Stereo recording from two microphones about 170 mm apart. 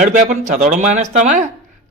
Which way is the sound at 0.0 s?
50° right (ahead or behind).